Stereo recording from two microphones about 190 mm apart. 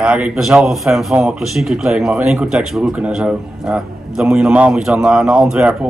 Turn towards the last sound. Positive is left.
turn(degrees=-5)  # may be behind; listen again after turning